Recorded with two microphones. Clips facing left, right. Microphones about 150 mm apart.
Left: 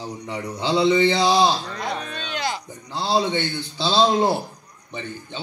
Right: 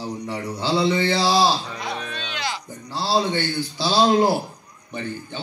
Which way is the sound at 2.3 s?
45° left (ahead or behind).